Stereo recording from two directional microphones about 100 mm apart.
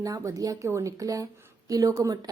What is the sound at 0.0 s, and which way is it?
Speech, 35° right (ahead or behind).